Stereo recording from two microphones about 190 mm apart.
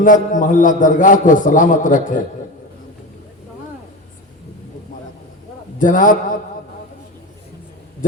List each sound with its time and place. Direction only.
0.0 s a man's voice: 45° left (ahead or behind)
5.8 s a man's voice: 45° left (ahead or behind)